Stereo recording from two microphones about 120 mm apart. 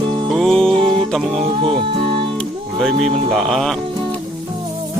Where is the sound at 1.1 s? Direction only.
Centre (ahead or behind).